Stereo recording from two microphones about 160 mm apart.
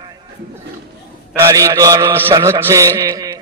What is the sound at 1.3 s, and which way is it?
A man's voice, 20° right (ahead or behind).